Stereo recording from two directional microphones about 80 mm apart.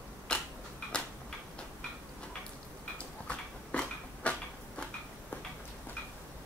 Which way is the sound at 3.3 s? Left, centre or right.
Centre.